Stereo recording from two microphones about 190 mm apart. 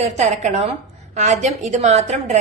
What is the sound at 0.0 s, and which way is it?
A woman's voice, 35° right (ahead or behind).